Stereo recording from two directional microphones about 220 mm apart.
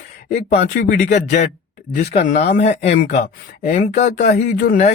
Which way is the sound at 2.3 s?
45° left (ahead or behind).